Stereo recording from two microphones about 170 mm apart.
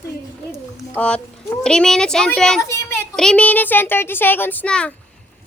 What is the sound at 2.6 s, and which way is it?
Speech, 15° left (ahead or behind).